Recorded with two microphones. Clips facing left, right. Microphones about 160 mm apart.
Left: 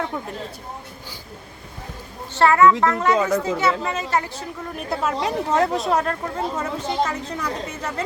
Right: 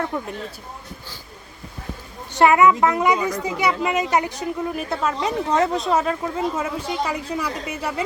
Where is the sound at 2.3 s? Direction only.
15° right (ahead or behind).